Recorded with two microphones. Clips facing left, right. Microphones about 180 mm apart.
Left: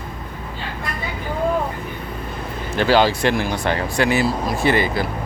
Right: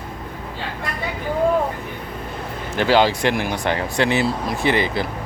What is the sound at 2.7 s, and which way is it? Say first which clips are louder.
Speech: even; 20° right (ahead or behind).